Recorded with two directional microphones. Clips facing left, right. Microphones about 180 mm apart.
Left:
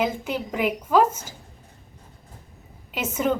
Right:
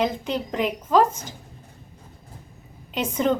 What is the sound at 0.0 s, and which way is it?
A woman's voice, 10° left (ahead or behind).